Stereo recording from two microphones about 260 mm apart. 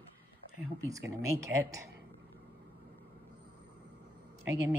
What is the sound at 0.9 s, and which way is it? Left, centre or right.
Speech, centre.